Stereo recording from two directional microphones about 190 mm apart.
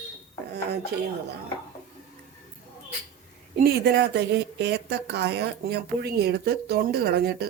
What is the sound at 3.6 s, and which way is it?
Speech, 55° right (ahead or behind).